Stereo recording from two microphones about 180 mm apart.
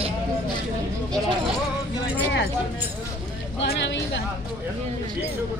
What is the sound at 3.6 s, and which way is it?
Speech, 85° left.